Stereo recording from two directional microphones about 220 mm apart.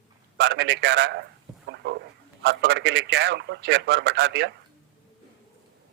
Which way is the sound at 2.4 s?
50° right (ahead or behind).